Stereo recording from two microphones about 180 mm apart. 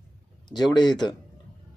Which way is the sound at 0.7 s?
25° left (ahead or behind).